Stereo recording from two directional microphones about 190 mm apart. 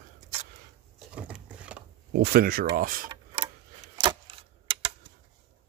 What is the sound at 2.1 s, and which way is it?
Speech, 60° right (ahead or behind).